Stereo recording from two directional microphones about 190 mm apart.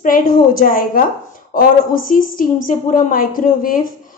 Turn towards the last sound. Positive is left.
turn(degrees=45)  # may be behind; listen again after turning